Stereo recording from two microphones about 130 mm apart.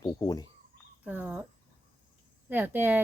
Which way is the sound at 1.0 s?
10° right (ahead or behind).